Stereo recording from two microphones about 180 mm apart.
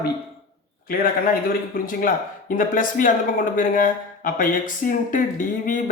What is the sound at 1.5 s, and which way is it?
Speech, 50° left (ahead or behind).